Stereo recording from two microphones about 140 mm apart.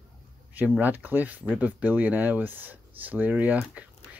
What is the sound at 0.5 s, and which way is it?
Speech, 10° right (ahead or behind).